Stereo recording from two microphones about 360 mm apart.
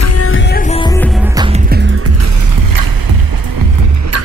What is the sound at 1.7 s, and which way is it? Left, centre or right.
Music, right.